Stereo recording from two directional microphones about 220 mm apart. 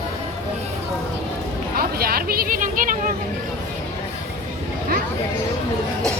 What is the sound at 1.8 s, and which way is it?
Chatter, 45° right (ahead or behind).